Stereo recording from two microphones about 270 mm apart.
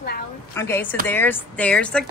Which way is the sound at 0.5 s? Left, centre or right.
Centre.